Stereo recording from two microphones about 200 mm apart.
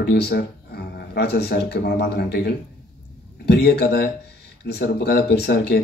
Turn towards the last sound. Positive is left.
turn(degrees=55)  # may be behind; listen again after turning